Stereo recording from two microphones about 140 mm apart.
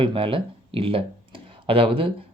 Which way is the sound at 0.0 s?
40° right (ahead or behind).